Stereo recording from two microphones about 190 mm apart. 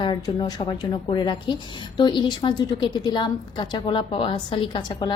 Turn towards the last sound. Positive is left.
turn(degrees=25)  # may be behind; listen again after turning